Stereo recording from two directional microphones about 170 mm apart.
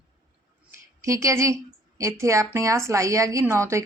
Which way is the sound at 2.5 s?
15° right (ahead or behind).